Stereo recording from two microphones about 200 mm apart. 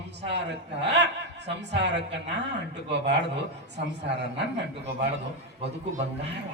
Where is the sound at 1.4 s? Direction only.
60° right (ahead or behind).